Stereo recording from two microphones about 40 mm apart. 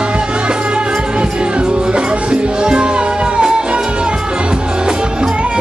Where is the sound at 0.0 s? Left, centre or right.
Right.